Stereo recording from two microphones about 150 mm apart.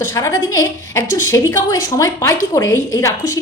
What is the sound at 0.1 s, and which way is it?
A woman's voice, 20° left (ahead or behind).